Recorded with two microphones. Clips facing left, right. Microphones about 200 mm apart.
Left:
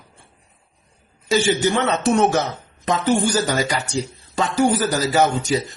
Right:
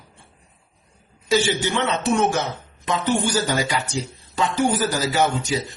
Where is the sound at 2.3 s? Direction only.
40° left (ahead or behind).